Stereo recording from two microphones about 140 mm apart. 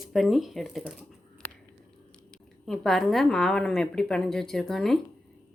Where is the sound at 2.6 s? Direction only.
5° left (ahead or behind).